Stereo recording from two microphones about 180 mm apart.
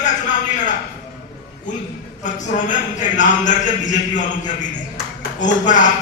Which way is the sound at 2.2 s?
45° left (ahead or behind).